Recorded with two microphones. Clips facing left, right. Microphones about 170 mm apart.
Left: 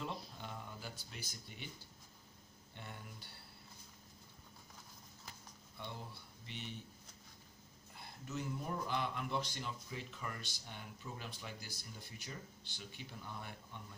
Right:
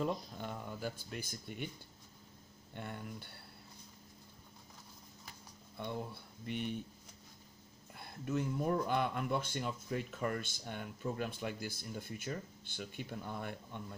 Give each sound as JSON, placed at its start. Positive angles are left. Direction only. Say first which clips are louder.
{"t": 0.0, "sound": "speech", "louder": "right 8 dB", "side_deg": -50}
{"t": 2.7, "sound": "speech", "louder": "right 8 dB", "side_deg": -55}
{"t": 6.4, "sound": "speech", "louder": "right 10 dB", "side_deg": -55}
{"t": 8.3, "sound": "speech", "louder": "right 8 dB", "side_deg": -55}